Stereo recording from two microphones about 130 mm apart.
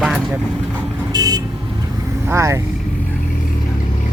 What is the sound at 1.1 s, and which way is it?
Vehicle, 30° right (ahead or behind).